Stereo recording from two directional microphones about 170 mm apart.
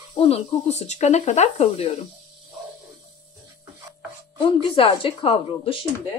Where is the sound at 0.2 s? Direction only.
40° left (ahead or behind).